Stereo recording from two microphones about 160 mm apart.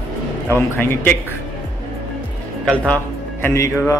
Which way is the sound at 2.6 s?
10° left (ahead or behind).